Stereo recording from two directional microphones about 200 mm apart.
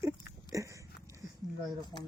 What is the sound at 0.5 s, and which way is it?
Biting, 15° right (ahead or behind).